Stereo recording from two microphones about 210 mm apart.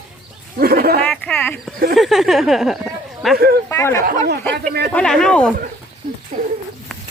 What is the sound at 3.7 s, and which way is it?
Speech, 15° left (ahead or behind).